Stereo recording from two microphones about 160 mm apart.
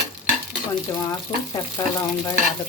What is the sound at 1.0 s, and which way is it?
Speech, 20° left (ahead or behind).